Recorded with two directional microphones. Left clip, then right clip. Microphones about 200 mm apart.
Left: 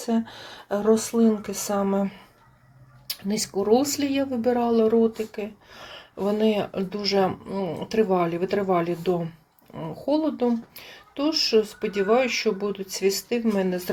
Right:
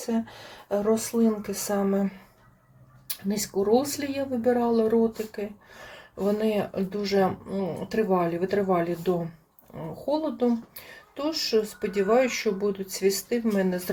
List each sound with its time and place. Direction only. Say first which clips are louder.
0.0 s speech: left 3 dB; 20° left (ahead or behind)